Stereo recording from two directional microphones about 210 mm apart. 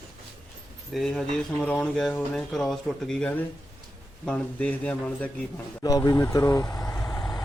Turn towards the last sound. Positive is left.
turn(degrees=15)  # may be behind; listen again after turning